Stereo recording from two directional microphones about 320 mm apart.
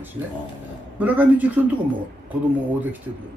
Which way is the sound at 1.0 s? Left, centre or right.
Centre.